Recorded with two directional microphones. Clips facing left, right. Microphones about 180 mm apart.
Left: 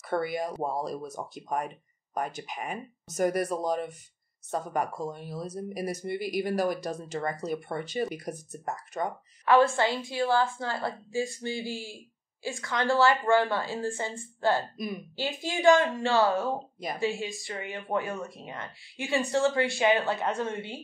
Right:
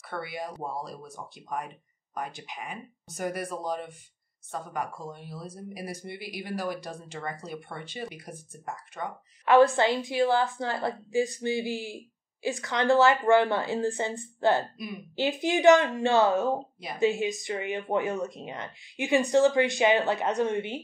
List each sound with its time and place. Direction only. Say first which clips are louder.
0.0 s speech: left 6 dB; 45° left (ahead or behind)
9.4 s speech: right 2 dB; 20° right (ahead or behind)